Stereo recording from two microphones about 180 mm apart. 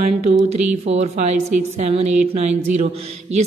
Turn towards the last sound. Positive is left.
turn(degrees=-35)  # may be behind; listen again after turning